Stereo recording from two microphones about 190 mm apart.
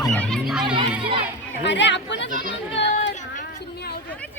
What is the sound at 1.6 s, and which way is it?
Speech, 70° left (ahead or behind).